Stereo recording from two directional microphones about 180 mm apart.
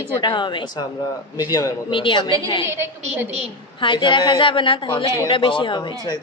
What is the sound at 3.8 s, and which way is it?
A man's voice, 25° left (ahead or behind).